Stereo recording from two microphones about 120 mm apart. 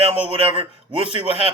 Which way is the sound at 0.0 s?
55° right (ahead or behind).